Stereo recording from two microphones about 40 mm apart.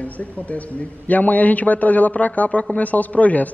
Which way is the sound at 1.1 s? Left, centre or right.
Left.